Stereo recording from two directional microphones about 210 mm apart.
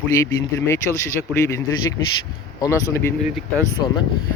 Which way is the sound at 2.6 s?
15° left (ahead or behind).